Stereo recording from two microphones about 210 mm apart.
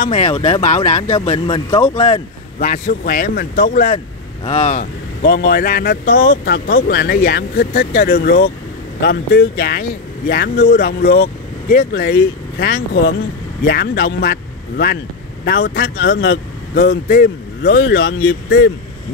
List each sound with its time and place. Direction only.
0.0 s speech: 30° left (ahead or behind)
1.3 s speech: 20° left (ahead or behind)
1.9 s speech: 30° left (ahead or behind)
5.2 s speech: 50° left (ahead or behind)